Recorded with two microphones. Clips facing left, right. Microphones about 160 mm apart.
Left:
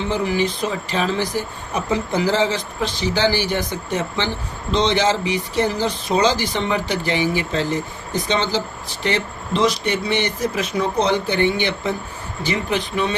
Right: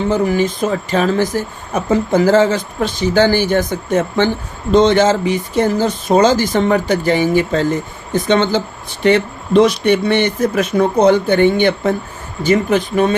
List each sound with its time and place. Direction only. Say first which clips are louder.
0.1 s speech: right 4 dB; 45° right (ahead or behind)